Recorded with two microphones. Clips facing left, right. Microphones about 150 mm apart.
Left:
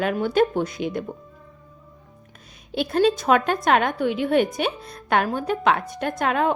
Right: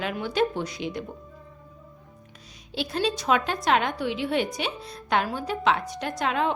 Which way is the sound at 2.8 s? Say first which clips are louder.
Left 7 dB; 50° left (ahead or behind).